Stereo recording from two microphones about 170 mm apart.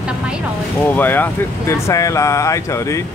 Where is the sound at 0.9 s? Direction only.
10° left (ahead or behind).